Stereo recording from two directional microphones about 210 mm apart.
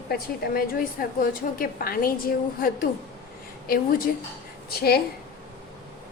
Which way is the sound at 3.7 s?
45° left (ahead or behind).